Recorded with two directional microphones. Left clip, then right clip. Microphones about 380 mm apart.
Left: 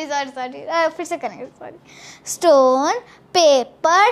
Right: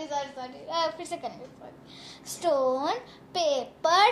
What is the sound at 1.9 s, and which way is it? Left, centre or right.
A child's voice, left.